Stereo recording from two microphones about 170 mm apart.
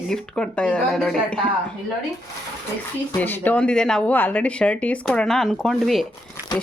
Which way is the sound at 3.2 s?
10° left (ahead or behind).